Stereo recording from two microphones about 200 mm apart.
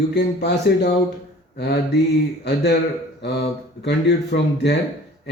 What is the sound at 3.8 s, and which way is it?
Speech, 60° left (ahead or behind).